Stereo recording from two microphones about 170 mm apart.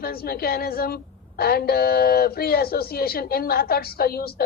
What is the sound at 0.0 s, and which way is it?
A woman's voice, 65° left (ahead or behind).